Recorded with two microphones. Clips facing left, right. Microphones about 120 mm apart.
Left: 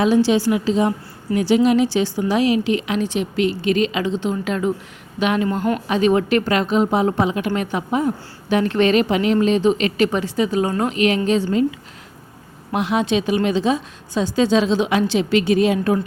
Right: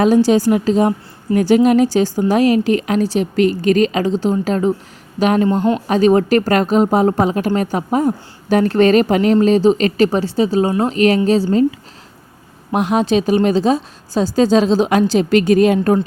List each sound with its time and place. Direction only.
0.0 s a woman's voice: 45° right (ahead or behind)
5.5 s speech: 30° right (ahead or behind)
5.9 s a woman's voice: 40° right (ahead or behind)
10.9 s a woman's voice: 40° right (ahead or behind)
12.7 s a woman's voice: 45° right (ahead or behind)